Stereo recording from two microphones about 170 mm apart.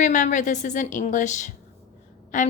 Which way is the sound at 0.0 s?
45° left (ahead or behind).